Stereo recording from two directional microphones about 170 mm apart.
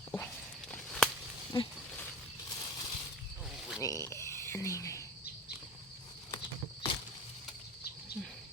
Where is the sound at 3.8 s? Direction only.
20° left (ahead or behind).